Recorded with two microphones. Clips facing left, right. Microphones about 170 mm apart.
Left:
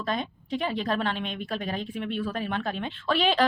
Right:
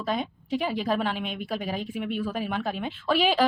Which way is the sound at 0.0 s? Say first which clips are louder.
Right 1 dB; 5° right (ahead or behind).